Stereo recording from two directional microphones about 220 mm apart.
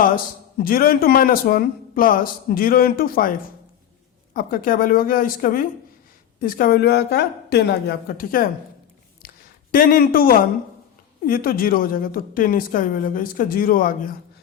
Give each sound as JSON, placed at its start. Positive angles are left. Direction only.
{"t": 0.6, "sound": "a woman's voice", "side_deg": 40}
{"t": 4.4, "sound": "a woman's voice", "side_deg": 40}
{"t": 9.2, "sound": "a sound", "side_deg": 40}
{"t": 9.7, "sound": "a woman's voice", "side_deg": 40}